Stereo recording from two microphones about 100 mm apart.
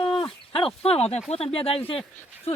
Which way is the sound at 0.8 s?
85° left.